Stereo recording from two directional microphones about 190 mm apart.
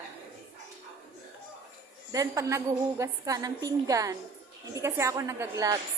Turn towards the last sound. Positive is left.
turn(degrees=-15)  # may be behind; listen again after turning